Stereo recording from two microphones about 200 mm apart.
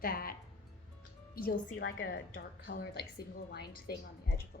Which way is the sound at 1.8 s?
75° left (ahead or behind).